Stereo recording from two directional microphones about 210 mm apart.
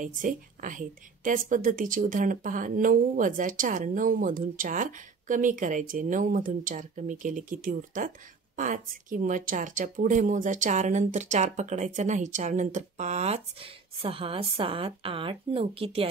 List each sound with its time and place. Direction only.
0.0 s a woman's voice: 40° right (ahead or behind)